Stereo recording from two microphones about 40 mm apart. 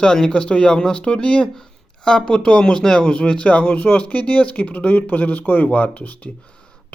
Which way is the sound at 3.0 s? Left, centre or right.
Left.